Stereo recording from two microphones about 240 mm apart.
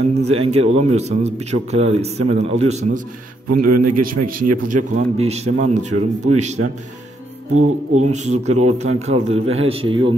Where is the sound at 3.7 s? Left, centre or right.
Right.